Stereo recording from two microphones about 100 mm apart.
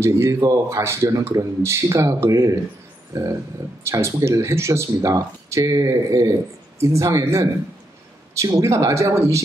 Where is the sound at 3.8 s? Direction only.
25° right (ahead or behind).